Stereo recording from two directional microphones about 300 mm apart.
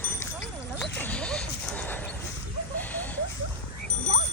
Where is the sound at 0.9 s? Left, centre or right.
Centre.